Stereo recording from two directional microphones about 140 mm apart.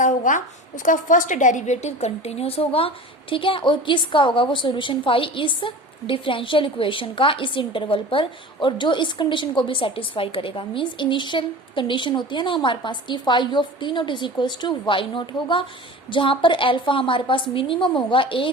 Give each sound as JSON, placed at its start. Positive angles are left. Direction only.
{"t": 0.0, "sound": "a woman's voice", "side_deg": 70}